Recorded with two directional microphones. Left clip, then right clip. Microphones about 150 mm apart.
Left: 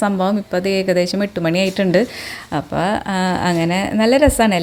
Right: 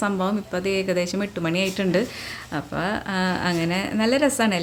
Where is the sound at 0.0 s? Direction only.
35° left (ahead or behind).